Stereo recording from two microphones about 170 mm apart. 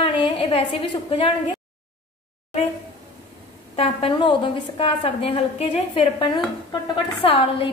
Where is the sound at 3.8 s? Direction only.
35° left (ahead or behind).